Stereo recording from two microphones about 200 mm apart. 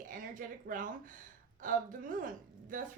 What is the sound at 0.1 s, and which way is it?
A woman's voice, 40° right (ahead or behind).